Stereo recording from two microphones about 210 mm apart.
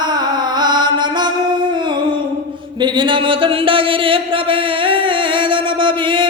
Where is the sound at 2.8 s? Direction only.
20° right (ahead or behind).